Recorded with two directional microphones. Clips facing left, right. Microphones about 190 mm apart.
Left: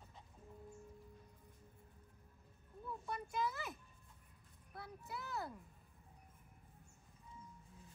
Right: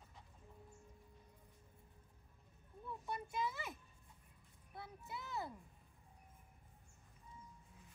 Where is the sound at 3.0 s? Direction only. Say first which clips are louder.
Left 1 dB; centre (ahead or behind).